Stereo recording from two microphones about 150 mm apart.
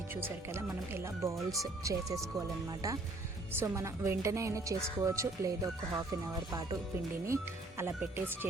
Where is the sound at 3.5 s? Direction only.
15° right (ahead or behind).